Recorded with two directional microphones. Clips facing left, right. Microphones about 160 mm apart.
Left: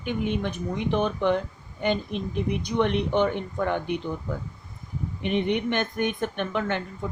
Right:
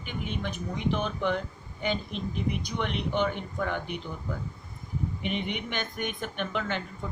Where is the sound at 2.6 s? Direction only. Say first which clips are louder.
Left 7 dB; 55° left (ahead or behind).